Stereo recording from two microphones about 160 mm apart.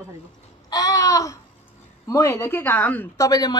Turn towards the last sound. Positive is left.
turn(degrees=20)  # may be behind; listen again after turning